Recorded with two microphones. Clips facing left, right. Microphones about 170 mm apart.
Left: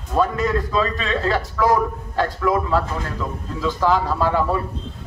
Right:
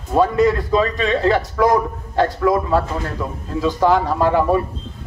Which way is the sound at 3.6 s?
20° right (ahead or behind).